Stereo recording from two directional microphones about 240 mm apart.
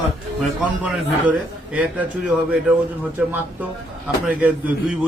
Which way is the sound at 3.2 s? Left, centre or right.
Centre.